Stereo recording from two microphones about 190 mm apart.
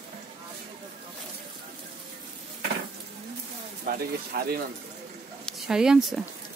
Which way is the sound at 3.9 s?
50° right (ahead or behind).